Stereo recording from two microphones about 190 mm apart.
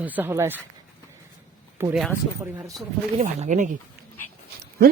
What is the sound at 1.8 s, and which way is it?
Speech, 15° right (ahead or behind).